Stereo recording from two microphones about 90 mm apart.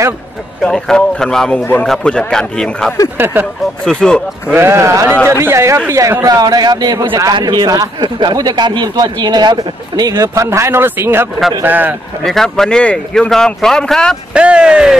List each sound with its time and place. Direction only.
0.6 s speech: 5° left (ahead or behind)
3.2 s speech: 25° right (ahead or behind)
3.8 s speech: 10° left (ahead or behind)
4.6 s a man's voice: 30° right (ahead or behind)
7.3 s a man's voice: 55° right (ahead or behind)
10.2 s speech: 35° right (ahead or behind)
12.2 s speech: 5° left (ahead or behind)
14.3 s speech: 10° right (ahead or behind)